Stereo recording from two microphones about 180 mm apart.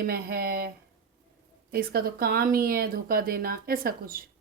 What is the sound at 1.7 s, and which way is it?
A woman's voice, 55° right (ahead or behind).